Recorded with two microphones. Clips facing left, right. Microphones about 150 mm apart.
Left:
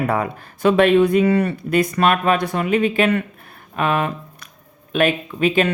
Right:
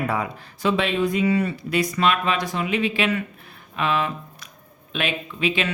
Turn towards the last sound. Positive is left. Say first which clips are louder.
# left 7 dB
turn(degrees=50)  # may be behind; listen again after turning